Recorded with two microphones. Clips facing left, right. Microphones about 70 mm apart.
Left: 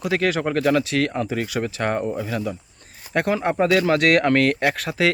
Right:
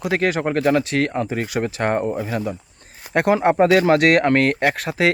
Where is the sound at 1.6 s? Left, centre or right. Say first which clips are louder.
Right 3 dB; right.